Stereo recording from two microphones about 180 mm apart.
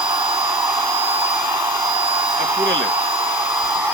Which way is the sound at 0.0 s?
25° right (ahead or behind).